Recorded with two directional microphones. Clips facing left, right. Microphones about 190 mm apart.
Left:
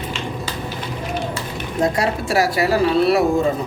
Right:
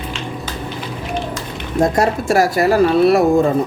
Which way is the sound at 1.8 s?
45° right (ahead or behind).